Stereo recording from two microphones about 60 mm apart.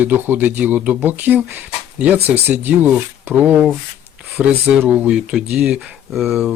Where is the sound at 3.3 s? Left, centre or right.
Right.